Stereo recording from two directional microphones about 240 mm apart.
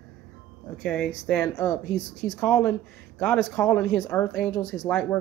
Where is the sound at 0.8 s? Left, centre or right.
Centre.